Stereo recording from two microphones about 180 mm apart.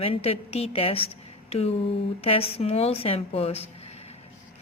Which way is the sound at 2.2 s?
30° left (ahead or behind).